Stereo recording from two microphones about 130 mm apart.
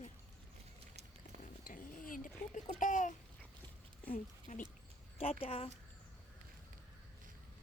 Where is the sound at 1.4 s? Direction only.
90° left.